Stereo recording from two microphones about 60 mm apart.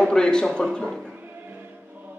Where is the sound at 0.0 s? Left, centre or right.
Centre.